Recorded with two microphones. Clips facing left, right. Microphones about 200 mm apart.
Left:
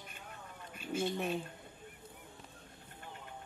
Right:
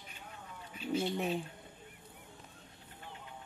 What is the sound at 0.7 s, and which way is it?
Duck, 50° left (ahead or behind).